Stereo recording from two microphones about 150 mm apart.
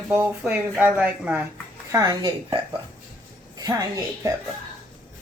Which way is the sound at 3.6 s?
25° right (ahead or behind).